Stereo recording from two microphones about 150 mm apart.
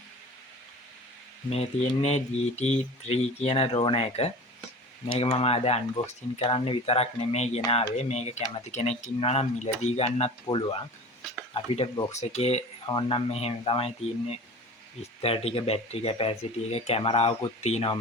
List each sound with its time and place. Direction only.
1.5 s speech: 45° left (ahead or behind)
10.4 s speech: 30° left (ahead or behind)
12.1 s speech: 45° left (ahead or behind)
12.8 s speech: 30° left (ahead or behind)